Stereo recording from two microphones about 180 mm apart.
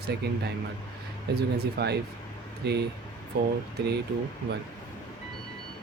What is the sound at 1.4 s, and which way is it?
Speech, 65° right (ahead or behind).